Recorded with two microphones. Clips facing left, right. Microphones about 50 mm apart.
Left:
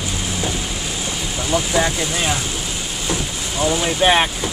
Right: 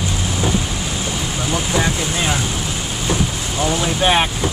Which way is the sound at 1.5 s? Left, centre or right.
Centre.